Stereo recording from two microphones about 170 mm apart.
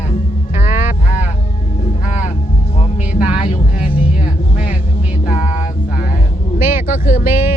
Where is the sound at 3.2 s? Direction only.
30° left (ahead or behind).